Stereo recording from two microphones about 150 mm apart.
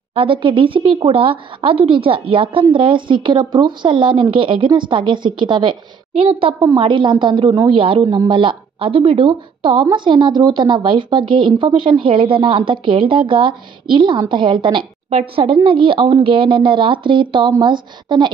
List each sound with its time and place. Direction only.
0.1 s speech: 35° right (ahead or behind)